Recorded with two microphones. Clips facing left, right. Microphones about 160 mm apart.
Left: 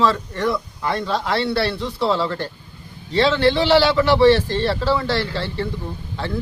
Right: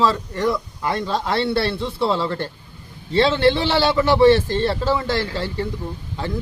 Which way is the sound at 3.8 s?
20° right (ahead or behind).